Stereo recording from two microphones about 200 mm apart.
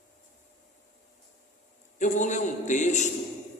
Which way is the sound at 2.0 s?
35° left (ahead or behind).